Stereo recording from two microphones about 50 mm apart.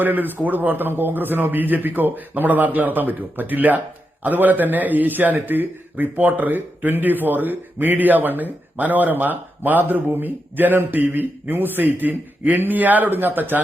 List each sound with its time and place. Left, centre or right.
0.0 s speech: right